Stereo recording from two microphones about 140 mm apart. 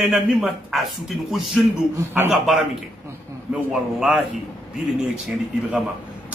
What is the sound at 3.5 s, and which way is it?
Speech, 5° right (ahead or behind).